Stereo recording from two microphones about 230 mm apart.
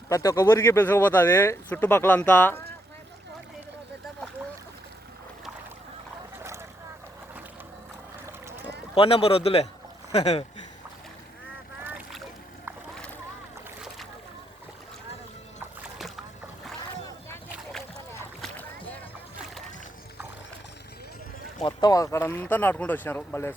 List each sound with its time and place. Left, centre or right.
0.1 s speech: centre
6.4 s boat: centre
9.0 s a man's voice: left
11.8 s boat: centre
17.2 s rowboat: centre
18.4 s music: centre
21.6 s speech: centre